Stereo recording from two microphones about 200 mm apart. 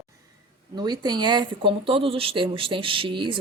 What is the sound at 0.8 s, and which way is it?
Speech, 20° right (ahead or behind).